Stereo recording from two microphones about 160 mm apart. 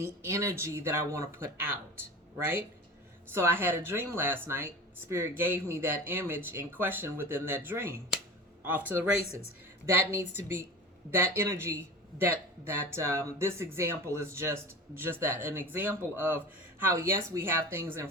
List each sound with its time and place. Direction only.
0.0 s speech: 15° right (ahead or behind)
3.3 s speech: 15° right (ahead or behind)